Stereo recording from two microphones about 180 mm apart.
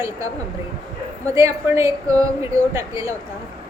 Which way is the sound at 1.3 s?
15° right (ahead or behind).